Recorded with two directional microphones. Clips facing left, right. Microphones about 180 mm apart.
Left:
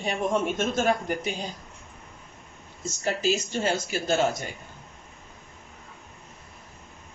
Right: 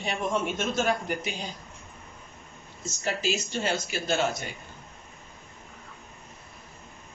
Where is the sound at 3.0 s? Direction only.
45° left (ahead or behind).